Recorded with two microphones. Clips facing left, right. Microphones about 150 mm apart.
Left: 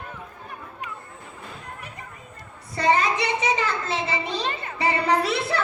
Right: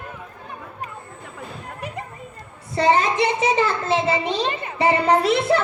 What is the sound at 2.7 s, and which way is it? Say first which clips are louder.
A child's voice: right 3 dB; 30° right (ahead or behind).